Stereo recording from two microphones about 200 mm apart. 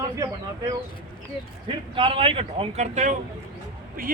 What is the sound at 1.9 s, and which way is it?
Speech, 25° right (ahead or behind).